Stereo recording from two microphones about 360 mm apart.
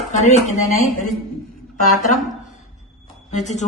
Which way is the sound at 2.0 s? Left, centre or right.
Left.